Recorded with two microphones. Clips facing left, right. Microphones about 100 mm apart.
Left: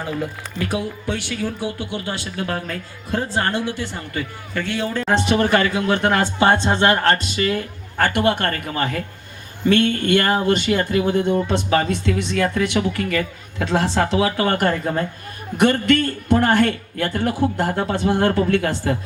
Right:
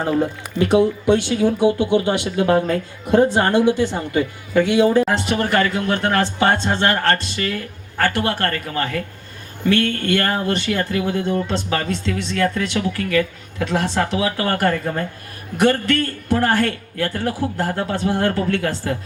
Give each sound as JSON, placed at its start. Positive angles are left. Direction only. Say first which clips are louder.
{"t": 0.0, "sound": "speech", "louder": "right 6 dB", "side_deg": -35}
{"t": 0.6, "sound": "speech", "louder": "right 9 dB", "side_deg": -25}
{"t": 5.0, "sound": "speech", "louder": "left 2 dB", "side_deg": 20}